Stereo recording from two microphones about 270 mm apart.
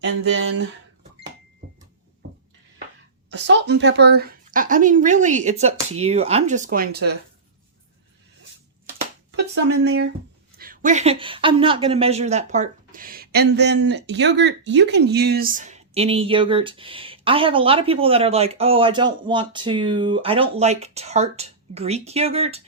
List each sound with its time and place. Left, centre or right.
3.2 s a woman's voice: right
9.8 s a woman's voice: right